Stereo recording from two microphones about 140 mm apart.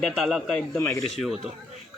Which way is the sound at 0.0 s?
Centre (ahead or behind).